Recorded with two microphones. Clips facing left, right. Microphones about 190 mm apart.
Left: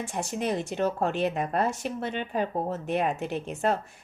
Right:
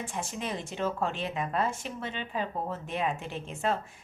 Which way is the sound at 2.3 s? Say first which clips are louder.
Left 4 dB; 45° left (ahead or behind).